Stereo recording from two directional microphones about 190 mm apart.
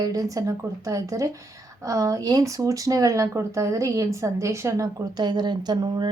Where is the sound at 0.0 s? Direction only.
20° right (ahead or behind).